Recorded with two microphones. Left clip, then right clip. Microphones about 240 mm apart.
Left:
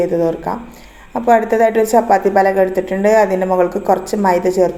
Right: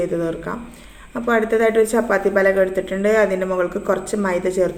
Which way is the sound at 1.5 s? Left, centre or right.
Centre.